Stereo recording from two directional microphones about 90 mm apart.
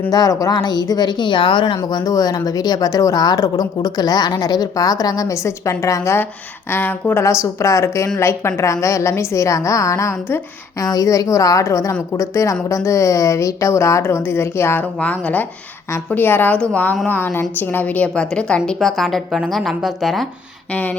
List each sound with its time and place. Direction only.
0.1 s speech: 45° left (ahead or behind)
6.7 s a woman's voice: 20° left (ahead or behind)
10.8 s a woman's voice: 45° left (ahead or behind); by 20.2 s centre (ahead or behind)